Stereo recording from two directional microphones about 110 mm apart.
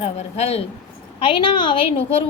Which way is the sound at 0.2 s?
75° left (ahead or behind).